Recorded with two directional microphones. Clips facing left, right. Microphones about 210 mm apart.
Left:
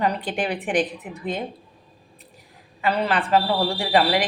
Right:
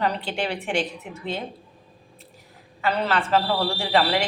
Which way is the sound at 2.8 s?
10° left (ahead or behind).